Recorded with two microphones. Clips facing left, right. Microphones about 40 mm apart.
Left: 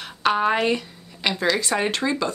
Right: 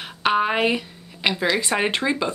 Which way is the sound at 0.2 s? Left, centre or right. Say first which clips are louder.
Even; centre.